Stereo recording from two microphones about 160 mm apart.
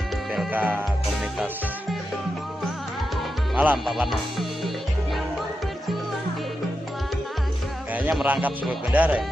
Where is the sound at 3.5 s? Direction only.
5° right (ahead or behind).